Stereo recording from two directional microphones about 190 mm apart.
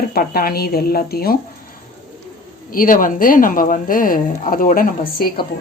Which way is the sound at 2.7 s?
50° left (ahead or behind).